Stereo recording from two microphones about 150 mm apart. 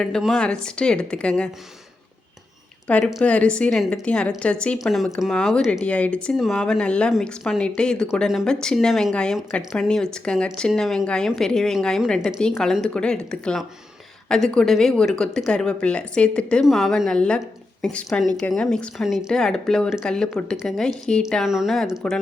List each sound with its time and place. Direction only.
0.0 s a woman's voice: centre (ahead or behind)
2.8 s a woman's voice: 10° left (ahead or behind)